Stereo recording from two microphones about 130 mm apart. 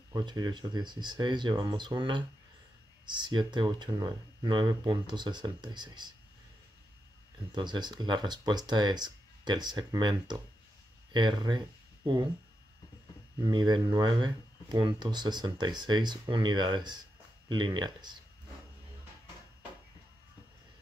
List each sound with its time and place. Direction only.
0.1 s speech: 35° right (ahead or behind)
7.5 s speech: 35° right (ahead or behind)
13.4 s speech: 35° right (ahead or behind)